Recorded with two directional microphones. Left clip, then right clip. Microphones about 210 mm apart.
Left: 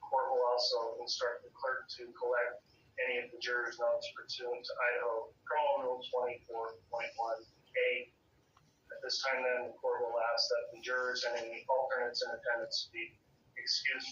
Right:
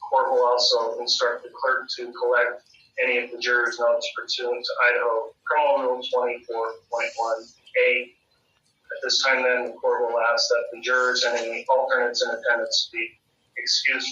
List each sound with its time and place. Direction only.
0.1 s a man's voice: 45° right (ahead or behind)